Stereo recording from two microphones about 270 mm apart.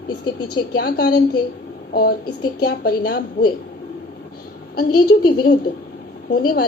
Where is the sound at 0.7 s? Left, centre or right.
Left.